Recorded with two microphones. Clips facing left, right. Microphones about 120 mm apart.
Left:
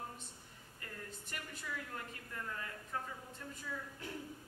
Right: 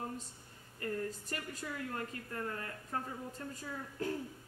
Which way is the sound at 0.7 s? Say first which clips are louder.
Right 12 dB; 40° right (ahead or behind).